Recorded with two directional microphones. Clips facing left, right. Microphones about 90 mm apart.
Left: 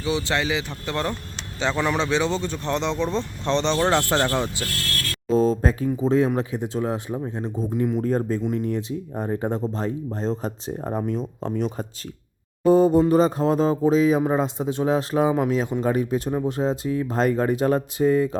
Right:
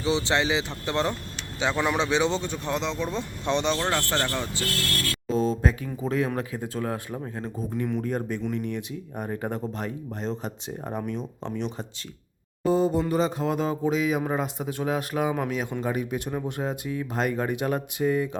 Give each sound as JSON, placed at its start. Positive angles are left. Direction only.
{"t": 0.0, "sound": "speech", "side_deg": -25}
{"t": 3.8, "sound": "speech", "side_deg": 20}
{"t": 5.3, "sound": "mantra", "side_deg": 40}
{"t": 6.0, "sound": "speech", "side_deg": 30}
{"t": 8.0, "sound": "a sound", "side_deg": 35}